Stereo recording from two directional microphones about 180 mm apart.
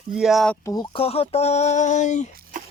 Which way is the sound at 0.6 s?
20° left (ahead or behind).